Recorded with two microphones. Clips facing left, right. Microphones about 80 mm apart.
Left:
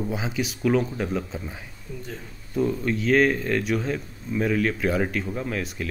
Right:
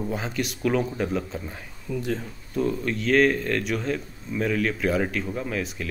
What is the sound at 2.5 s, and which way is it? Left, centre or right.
Speech, centre.